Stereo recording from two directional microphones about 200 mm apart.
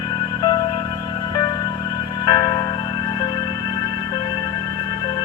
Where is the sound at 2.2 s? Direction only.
25° left (ahead or behind).